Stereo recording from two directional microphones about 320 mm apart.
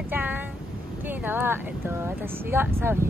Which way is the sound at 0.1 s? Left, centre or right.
Centre.